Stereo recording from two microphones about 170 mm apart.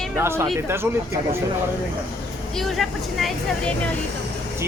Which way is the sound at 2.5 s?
Centre (ahead or behind).